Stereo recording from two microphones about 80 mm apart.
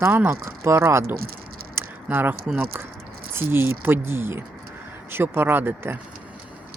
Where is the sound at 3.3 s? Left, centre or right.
Right.